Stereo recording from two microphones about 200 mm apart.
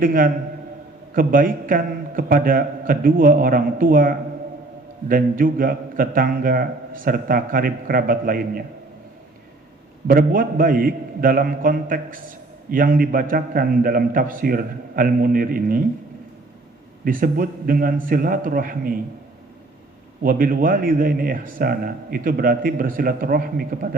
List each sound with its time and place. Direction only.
0.0 s a man's voice: 45° right (ahead or behind)
10.1 s a man's voice: 45° right (ahead or behind)
17.0 s a man's voice: 45° right (ahead or behind)
20.2 s a man's voice: 45° right (ahead or behind)